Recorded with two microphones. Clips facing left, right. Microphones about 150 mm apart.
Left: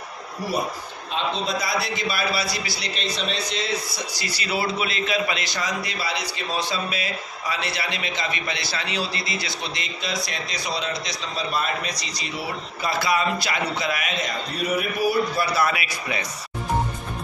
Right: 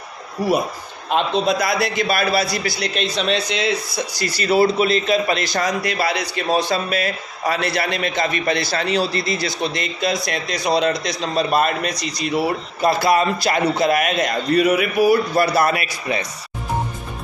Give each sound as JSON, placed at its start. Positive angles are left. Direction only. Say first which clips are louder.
{"t": 1.1, "sound": "a man's voice", "louder": "right 8 dB", "side_deg": -65}
{"t": 4.2, "sound": "a man's voice", "louder": "right 11 dB", "side_deg": -45}